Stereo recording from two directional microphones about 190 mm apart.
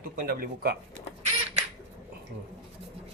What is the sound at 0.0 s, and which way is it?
Speech, 50° right (ahead or behind).